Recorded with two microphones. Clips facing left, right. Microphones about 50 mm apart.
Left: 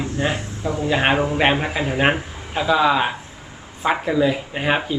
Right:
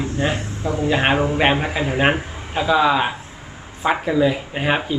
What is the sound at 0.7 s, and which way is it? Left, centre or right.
Speech, right.